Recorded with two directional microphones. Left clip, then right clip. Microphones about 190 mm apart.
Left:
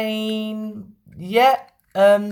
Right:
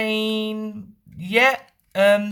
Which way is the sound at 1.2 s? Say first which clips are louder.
Left 2 dB; 20° right (ahead or behind).